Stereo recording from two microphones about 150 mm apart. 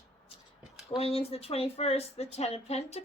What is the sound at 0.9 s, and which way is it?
Speech, 40° left (ahead or behind).